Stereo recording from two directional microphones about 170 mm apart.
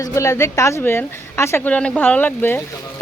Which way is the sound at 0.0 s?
15° left (ahead or behind).